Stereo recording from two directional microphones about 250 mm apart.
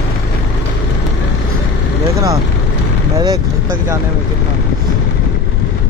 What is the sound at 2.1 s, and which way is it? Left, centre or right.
Vehicle, centre.